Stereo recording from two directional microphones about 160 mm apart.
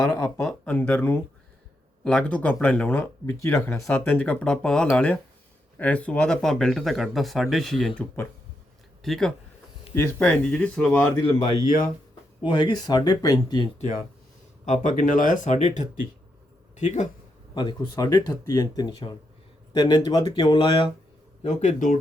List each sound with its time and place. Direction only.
0.4 s speech: 10° left (ahead or behind)
3.8 s speech: 5° left (ahead or behind)
9.9 s speech: 15° left (ahead or behind)
11.6 s speech: 55° left (ahead or behind)
12.5 s speech: 25° left (ahead or behind)
14.6 s speech: 50° left (ahead or behind)
17.5 s speech: 30° left (ahead or behind)
21.4 s speech: 50° left (ahead or behind)